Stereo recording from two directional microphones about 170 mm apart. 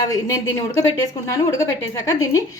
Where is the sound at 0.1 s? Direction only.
20° left (ahead or behind).